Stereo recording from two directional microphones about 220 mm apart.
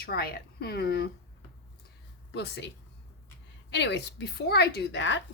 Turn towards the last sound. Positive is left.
turn(degrees=55)  # may be behind; listen again after turning